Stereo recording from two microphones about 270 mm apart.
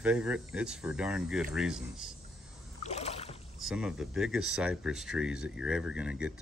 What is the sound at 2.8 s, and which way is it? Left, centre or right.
Rowboat, left.